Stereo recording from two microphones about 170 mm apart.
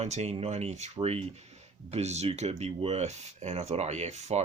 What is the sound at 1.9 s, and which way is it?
Speech, 40° right (ahead or behind).